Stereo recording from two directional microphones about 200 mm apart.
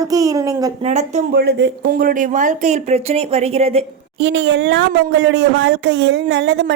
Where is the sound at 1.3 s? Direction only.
50° right (ahead or behind); by 3.8 s 30° right (ahead or behind).